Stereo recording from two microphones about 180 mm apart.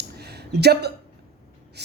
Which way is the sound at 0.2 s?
65° right (ahead or behind).